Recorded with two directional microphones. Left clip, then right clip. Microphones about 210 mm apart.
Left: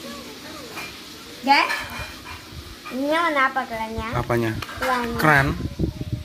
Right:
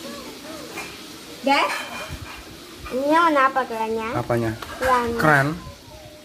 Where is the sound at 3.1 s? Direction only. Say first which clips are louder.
Right 3 dB; 30° right (ahead or behind).